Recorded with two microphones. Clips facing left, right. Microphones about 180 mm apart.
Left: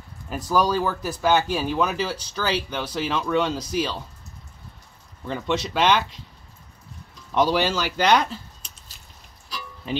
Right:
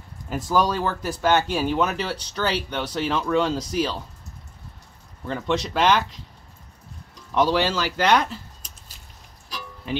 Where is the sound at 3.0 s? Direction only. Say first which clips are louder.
Right 1 dB; 20° right (ahead or behind).